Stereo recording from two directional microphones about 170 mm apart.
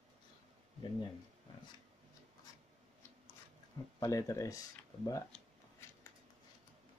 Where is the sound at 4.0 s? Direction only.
20° left (ahead or behind).